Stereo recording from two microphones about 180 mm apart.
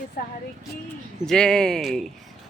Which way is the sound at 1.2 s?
5° left (ahead or behind).